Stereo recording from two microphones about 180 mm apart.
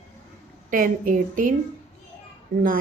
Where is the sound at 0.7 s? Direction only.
50° right (ahead or behind).